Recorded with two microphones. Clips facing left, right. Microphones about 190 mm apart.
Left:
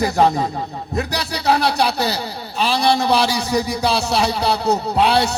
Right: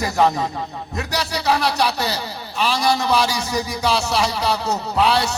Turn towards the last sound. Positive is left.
turn(degrees=35)  # may be behind; listen again after turning